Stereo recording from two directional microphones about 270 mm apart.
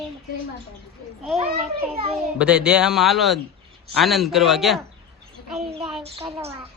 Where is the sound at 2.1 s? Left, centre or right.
Centre.